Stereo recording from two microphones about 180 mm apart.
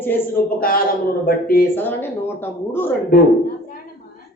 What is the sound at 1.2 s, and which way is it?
Speech, 55° left (ahead or behind).